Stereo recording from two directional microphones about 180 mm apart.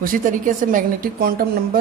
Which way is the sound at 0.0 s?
50° right (ahead or behind).